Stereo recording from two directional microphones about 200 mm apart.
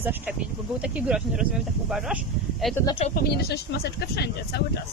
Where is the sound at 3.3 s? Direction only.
55° left (ahead or behind).